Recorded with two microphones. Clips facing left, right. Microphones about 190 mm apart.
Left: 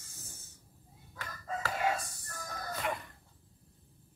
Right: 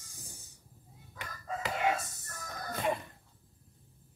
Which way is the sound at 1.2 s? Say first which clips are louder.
Even; 20° right (ahead or behind).